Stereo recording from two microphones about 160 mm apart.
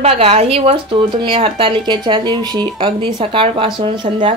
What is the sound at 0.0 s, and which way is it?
Speech, 40° right (ahead or behind).